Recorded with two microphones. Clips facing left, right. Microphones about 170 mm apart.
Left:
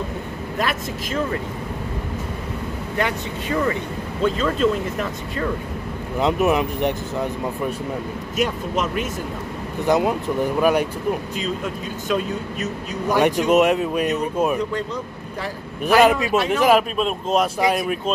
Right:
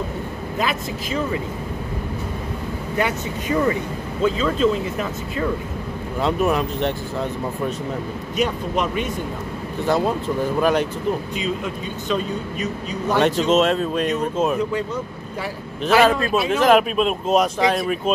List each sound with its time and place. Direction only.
0.6 s speech: centre (ahead or behind)
3.0 s speech: 10° right (ahead or behind)
6.1 s speech: 20° left (ahead or behind)
8.4 s speech: 5° left (ahead or behind)
9.8 s speech: 15° left (ahead or behind)
11.3 s speech: centre (ahead or behind)
13.1 s speech: 15° left (ahead or behind)
16.0 s speech: 15° left (ahead or behind)
16.7 s speech: centre (ahead or behind)